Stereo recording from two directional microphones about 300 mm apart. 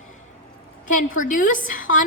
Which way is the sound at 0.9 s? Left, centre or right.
Left.